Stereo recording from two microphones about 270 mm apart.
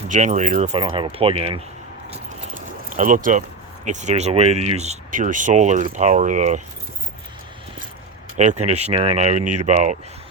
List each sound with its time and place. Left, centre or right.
0.1 s speech: right
2.0 s keys jangling: right
3.8 s speech: right
8.4 s speech: right
9.4 s speech: right
9.6 s speech: right